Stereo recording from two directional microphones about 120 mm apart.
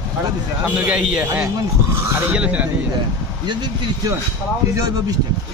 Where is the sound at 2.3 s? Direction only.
10° right (ahead or behind).